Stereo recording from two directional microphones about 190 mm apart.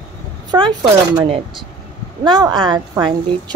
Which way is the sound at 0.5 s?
25° right (ahead or behind).